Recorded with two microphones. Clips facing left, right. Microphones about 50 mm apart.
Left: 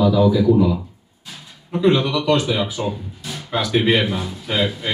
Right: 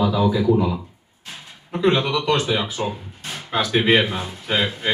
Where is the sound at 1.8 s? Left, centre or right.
Right.